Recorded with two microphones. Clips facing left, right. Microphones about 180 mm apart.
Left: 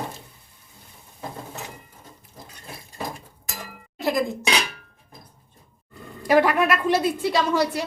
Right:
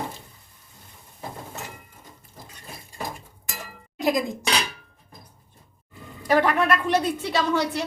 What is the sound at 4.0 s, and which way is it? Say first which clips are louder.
Dishes: even; 15° right (ahead or behind).